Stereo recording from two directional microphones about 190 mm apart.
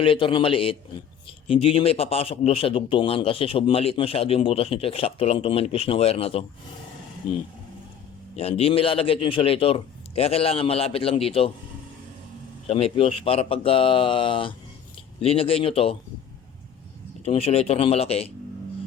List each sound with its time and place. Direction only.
0.0 s a man's voice: 30° left (ahead or behind)
8.4 s a man's voice: 30° left (ahead or behind)
12.6 s speech: 30° left (ahead or behind)
17.2 s a man's voice: 30° left (ahead or behind)